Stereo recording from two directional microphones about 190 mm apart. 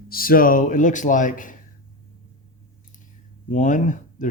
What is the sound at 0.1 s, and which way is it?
Speech, 50° left (ahead or behind).